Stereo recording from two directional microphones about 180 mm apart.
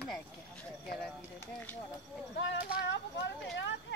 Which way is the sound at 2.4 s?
85° left.